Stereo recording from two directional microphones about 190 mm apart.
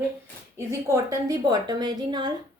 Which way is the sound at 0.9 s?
20° right (ahead or behind).